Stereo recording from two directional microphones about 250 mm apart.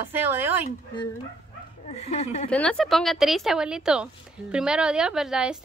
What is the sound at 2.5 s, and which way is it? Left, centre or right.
A woman's voice, centre.